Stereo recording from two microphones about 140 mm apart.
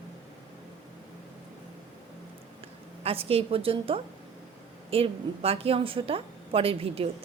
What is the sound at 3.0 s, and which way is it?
A woman's voice, 45° right (ahead or behind).